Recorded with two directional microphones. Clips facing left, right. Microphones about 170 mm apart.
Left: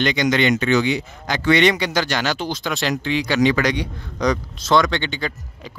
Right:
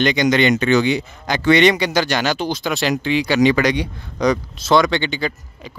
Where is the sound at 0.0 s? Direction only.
15° right (ahead or behind).